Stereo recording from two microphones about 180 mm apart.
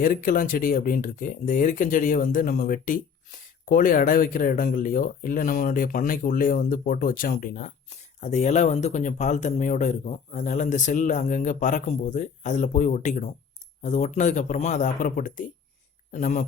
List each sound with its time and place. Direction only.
0.0 s speech: 50° left (ahead or behind)